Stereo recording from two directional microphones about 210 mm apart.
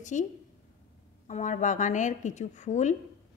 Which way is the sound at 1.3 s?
35° left (ahead or behind).